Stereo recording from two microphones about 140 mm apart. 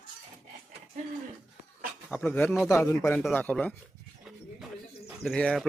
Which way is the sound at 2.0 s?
10° left (ahead or behind).